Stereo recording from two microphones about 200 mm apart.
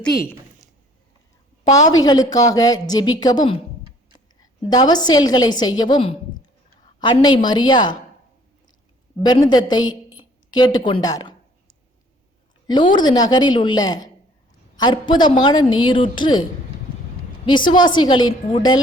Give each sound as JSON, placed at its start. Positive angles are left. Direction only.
{"t": 2.0, "sound": "a woman's voice", "side_deg": 20}
{"t": 4.7, "sound": "a woman's voice", "side_deg": 20}
{"t": 9.2, "sound": "a woman's voice", "side_deg": 20}
{"t": 12.6, "sound": "a woman's voice", "side_deg": 20}